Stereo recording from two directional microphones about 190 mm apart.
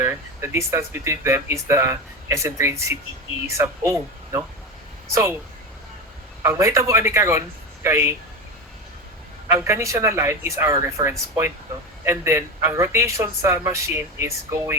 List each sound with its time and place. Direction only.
0.0 s a man's voice: 15° right (ahead or behind)
6.4 s a man's voice: 15° right (ahead or behind)
9.5 s a man's voice: 15° right (ahead or behind)